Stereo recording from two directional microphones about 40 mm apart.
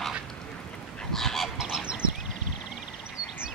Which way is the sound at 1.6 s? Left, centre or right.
Centre.